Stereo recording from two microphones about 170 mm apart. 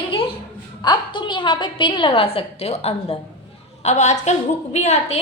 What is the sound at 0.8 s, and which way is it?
A woman's voice, 25° left (ahead or behind).